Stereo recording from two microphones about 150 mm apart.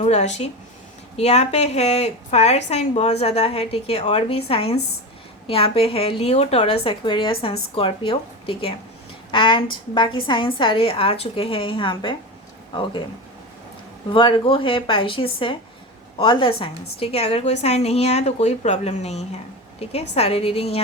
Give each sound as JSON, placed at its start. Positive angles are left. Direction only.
{"t": 0.0, "sound": "a woman's voice", "side_deg": 50}
{"t": 14.1, "sound": "a woman's voice", "side_deg": 35}